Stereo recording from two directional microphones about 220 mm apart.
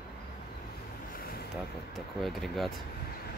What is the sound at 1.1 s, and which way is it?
Boat, 40° left (ahead or behind).